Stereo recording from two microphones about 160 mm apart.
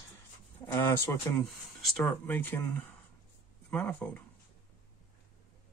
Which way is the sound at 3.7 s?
10° left (ahead or behind).